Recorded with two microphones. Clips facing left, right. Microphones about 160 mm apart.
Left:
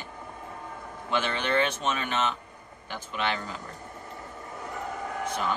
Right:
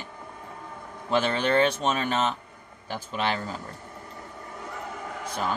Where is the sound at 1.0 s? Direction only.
35° right (ahead or behind).